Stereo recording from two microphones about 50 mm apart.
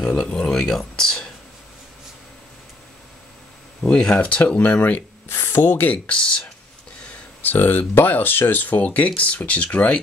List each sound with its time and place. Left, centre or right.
0.2 s speech: centre
3.8 s speech: centre
5.3 s speech: left
5.6 s speech: left
6.0 s speech: centre
7.4 s speech: left